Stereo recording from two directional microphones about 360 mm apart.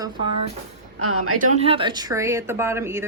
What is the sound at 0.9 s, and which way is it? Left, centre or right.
Speech, right.